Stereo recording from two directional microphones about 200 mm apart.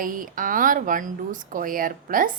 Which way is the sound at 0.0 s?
45° right (ahead or behind).